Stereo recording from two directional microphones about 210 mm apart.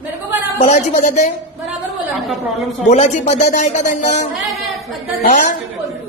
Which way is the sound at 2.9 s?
30° left (ahead or behind).